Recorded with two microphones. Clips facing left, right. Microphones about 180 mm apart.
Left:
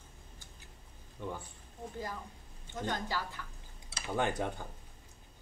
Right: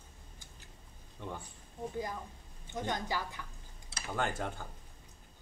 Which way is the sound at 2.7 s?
15° right (ahead or behind).